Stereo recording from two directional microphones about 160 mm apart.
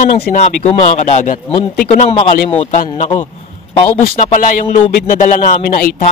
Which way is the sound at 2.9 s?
25° left (ahead or behind).